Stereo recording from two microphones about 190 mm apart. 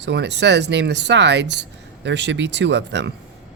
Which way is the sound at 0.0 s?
65° right (ahead or behind).